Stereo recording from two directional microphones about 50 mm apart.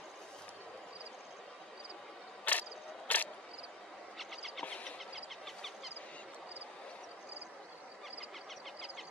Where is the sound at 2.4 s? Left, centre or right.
Left.